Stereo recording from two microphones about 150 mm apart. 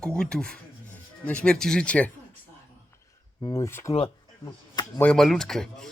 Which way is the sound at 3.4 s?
20° left (ahead or behind).